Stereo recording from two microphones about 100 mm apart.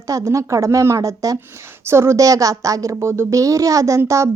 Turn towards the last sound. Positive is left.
turn(degrees=-30)  # may be behind; listen again after turning